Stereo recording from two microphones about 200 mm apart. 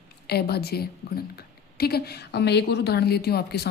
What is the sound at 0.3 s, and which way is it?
A woman's voice, 55° left (ahead or behind).